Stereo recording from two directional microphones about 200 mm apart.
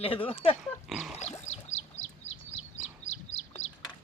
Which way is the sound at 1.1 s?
35° left (ahead or behind).